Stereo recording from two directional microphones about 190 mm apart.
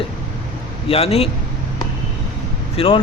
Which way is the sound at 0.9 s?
30° left (ahead or behind).